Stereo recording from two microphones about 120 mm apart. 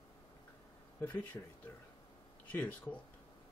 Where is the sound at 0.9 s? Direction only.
15° left (ahead or behind).